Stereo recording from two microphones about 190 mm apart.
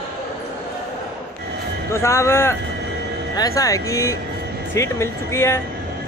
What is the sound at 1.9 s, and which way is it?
Speech, 15° left (ahead or behind).